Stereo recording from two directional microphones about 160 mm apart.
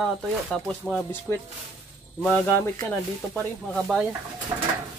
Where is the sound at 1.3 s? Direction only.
15° left (ahead or behind).